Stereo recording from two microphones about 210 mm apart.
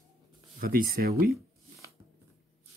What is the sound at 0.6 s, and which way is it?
Speech, 45° right (ahead or behind).